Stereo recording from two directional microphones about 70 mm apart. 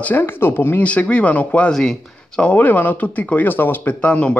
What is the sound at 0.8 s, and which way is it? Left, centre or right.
Speech, centre.